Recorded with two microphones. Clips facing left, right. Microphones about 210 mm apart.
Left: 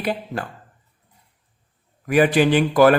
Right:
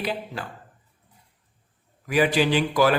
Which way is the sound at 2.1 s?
55° left (ahead or behind).